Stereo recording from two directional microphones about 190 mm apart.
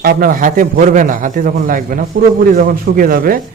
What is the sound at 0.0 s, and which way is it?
A man's voice, 50° right (ahead or behind).